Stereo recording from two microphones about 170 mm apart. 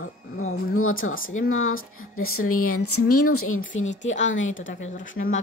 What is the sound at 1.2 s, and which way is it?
Speech, 60° left (ahead or behind).